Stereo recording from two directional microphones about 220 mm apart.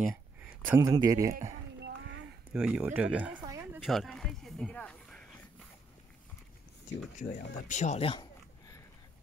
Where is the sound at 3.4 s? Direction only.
15° right (ahead or behind).